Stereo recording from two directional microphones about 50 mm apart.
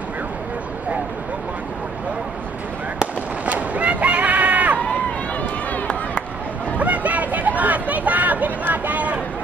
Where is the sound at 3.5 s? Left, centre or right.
Right.